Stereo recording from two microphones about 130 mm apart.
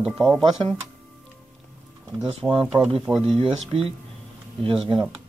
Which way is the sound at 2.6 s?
5° right (ahead or behind).